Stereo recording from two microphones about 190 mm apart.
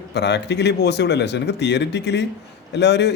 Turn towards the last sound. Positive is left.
turn(degrees=65)  # may be behind; listen again after turning